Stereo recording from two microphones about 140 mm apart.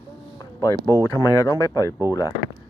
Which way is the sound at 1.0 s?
25° left (ahead or behind).